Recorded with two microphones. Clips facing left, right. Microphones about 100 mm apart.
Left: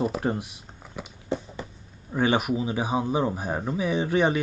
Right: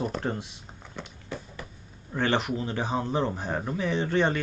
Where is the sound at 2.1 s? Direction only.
10° left (ahead or behind).